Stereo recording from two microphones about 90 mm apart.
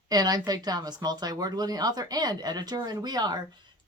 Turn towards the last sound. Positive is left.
turn(degrees=-50)  # may be behind; listen again after turning